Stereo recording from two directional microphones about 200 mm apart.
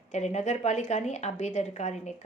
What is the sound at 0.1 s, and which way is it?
A woman's voice, 35° left (ahead or behind).